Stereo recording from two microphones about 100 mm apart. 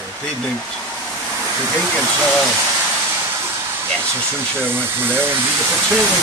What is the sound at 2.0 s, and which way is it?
Speech, centre (ahead or behind).